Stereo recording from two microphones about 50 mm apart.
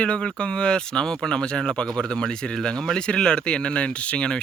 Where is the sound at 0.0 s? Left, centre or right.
Left.